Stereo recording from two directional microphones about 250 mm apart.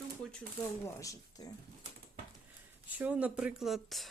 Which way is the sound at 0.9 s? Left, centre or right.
Centre.